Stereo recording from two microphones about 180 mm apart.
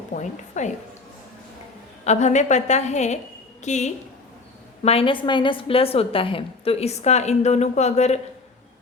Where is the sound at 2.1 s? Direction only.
40° left (ahead or behind).